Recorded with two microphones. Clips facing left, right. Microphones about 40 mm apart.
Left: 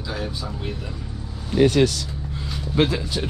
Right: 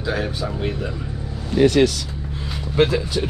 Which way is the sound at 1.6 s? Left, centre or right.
Right.